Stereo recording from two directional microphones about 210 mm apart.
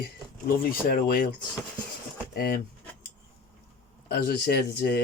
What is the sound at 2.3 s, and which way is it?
Speech, 45° left (ahead or behind).